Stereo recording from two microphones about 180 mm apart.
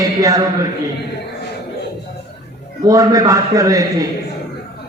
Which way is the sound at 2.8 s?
20° right (ahead or behind).